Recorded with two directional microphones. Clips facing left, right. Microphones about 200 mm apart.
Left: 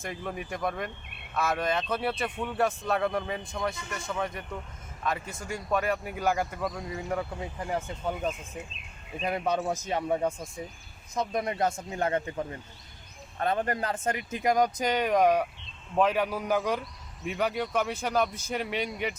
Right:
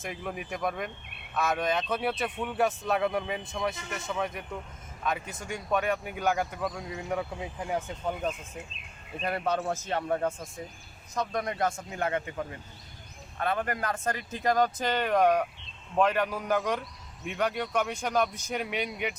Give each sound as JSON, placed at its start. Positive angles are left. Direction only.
{"t": 0.0, "sound": "speech", "side_deg": 0}
{"t": 9.8, "sound": "speech", "side_deg": 10}
{"t": 11.1, "sound": "speech", "side_deg": 25}
{"t": 13.4, "sound": "speech", "side_deg": 40}
{"t": 13.7, "sound": "speech", "side_deg": 25}